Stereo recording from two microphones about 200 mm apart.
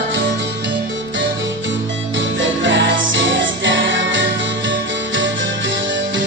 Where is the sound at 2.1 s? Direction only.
65° right (ahead or behind).